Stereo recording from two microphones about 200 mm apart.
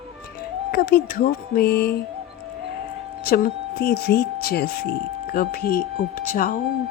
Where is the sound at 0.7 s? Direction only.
50° left (ahead or behind).